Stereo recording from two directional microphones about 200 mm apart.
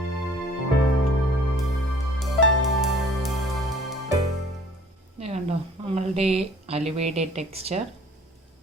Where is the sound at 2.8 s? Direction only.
Centre (ahead or behind).